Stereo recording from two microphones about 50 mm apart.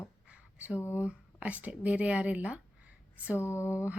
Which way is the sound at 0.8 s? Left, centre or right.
Left.